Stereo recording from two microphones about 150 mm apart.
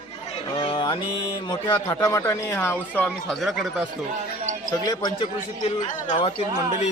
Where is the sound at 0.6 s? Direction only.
35° left (ahead or behind); by 3.1 s 10° left (ahead or behind).